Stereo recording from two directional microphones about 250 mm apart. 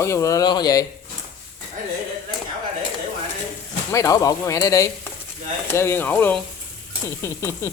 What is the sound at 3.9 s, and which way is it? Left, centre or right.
A man's voice, centre.